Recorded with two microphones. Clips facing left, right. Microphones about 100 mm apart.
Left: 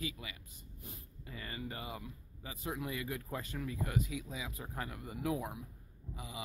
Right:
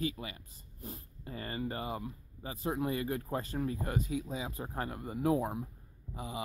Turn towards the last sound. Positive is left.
turn(degrees=-40)  # may be behind; listen again after turning